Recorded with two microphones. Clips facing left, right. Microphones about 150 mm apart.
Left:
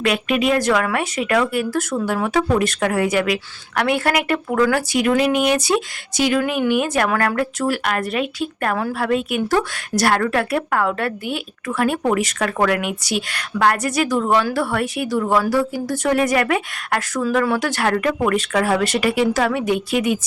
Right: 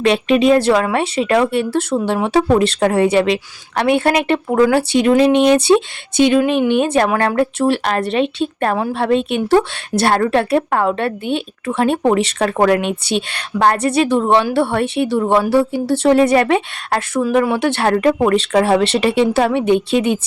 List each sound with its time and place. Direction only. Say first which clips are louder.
0.0 s speech: right 6 dB; 30° right (ahead or behind)